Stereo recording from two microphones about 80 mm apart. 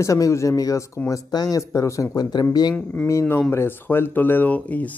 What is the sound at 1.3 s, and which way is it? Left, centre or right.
Speech, left.